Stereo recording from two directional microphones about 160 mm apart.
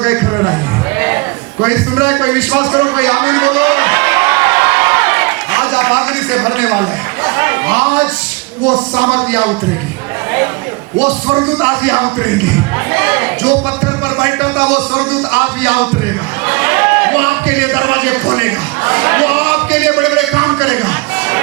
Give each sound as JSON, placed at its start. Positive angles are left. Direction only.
{"t": 0.0, "sound": "a man's voice", "side_deg": -15}
{"t": 0.9, "sound": "a sound", "side_deg": -15}
{"t": 9.0, "sound": "a man's voice", "side_deg": -10}
{"t": 11.0, "sound": "a man's voice", "side_deg": -15}
{"t": 16.5, "sound": "a sound", "side_deg": -10}
{"t": 18.3, "sound": "a man's voice", "side_deg": -15}
{"t": 20.7, "sound": "music", "side_deg": -10}